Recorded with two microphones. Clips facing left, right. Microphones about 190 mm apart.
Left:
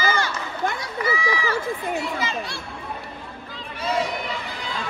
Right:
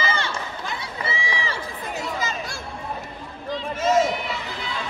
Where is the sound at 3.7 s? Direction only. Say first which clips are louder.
Right 5 dB; 45° right (ahead or behind).